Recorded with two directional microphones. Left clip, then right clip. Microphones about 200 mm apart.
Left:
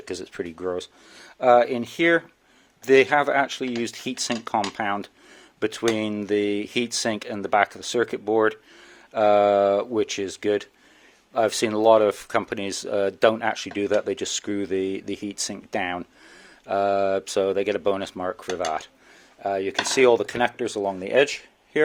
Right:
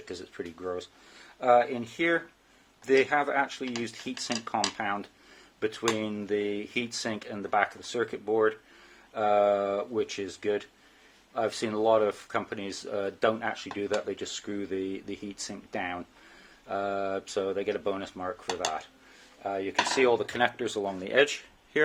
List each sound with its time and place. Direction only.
0.0 s speech: 45° left (ahead or behind); by 21.8 s 25° left (ahead or behind)